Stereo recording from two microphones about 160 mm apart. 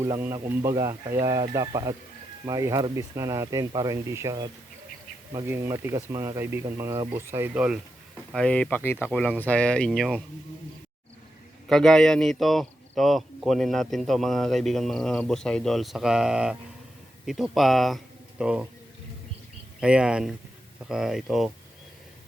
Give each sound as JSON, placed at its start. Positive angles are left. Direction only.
{"t": 0.0, "sound": "speech", "side_deg": -15}
{"t": 8.3, "sound": "speech", "side_deg": 5}
{"t": 11.7, "sound": "speech", "side_deg": 0}
{"t": 19.8, "sound": "speech", "side_deg": -5}